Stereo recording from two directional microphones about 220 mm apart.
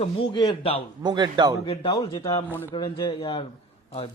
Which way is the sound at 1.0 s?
20° right (ahead or behind).